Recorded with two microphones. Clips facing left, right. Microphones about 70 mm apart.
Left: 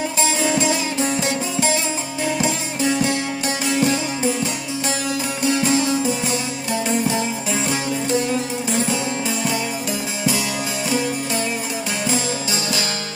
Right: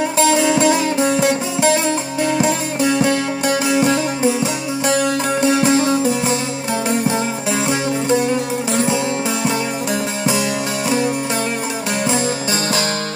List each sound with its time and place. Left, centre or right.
0.2 s music: right
3.0 s music: right
4.9 s music: right
5.7 s music: right
8.1 s music: right